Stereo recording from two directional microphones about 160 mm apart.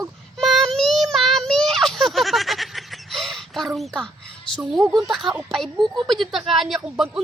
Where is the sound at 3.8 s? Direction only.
Centre (ahead or behind).